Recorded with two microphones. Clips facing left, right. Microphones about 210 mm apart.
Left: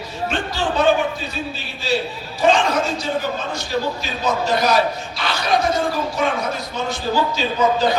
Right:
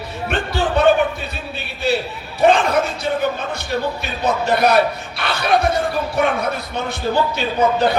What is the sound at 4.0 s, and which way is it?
A man's voice, 60° right (ahead or behind).